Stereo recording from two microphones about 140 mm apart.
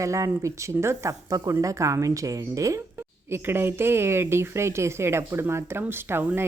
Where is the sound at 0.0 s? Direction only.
20° right (ahead or behind).